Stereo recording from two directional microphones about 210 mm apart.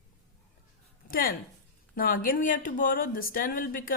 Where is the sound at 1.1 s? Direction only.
45° left (ahead or behind).